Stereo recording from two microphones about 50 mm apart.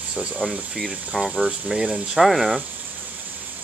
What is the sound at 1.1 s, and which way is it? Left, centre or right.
Speech, centre.